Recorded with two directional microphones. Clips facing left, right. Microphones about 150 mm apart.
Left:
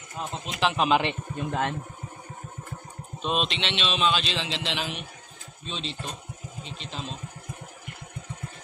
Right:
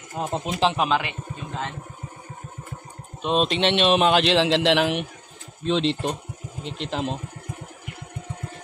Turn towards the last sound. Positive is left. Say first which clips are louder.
# right 9 dB
turn(degrees=-70)  # may be behind; listen again after turning